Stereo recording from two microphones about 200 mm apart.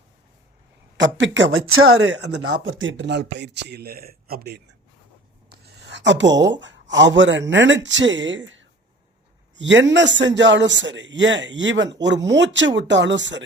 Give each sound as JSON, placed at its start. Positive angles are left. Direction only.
{"t": 0.9, "sound": "speech", "side_deg": -65}